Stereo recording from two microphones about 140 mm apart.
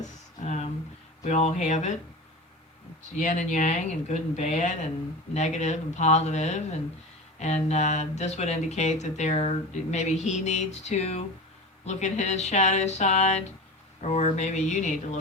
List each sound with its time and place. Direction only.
0.3 s a sound: 55° left (ahead or behind)
1.2 s speech: 55° left (ahead or behind)
3.0 s speech: 60° left (ahead or behind)